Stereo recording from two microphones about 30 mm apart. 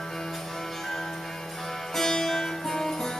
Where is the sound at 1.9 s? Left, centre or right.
Centre.